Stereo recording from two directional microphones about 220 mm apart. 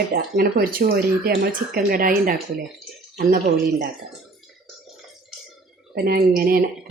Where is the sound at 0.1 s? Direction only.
40° right (ahead or behind).